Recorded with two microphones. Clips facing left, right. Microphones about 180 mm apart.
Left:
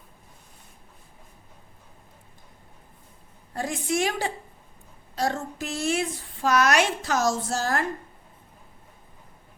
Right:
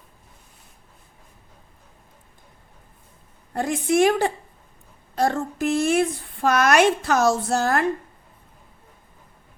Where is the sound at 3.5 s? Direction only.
60° right (ahead or behind).